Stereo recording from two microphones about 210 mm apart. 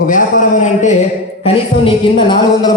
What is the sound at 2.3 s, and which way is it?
Speech, 20° left (ahead or behind).